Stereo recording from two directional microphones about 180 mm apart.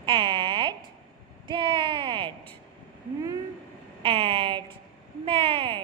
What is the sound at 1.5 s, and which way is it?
Speech, 30° right (ahead or behind).